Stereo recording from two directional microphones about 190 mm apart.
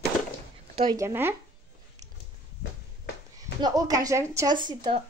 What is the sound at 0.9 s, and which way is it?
Speech, 15° right (ahead or behind).